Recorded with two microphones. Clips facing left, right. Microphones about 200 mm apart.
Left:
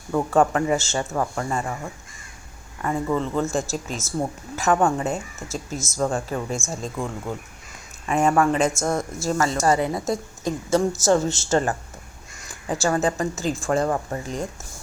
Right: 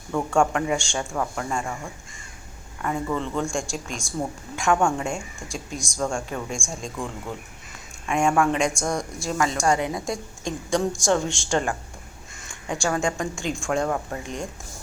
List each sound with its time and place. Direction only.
0.3 s speech: centre (ahead or behind)
3.2 s a woman's voice: 5° left (ahead or behind)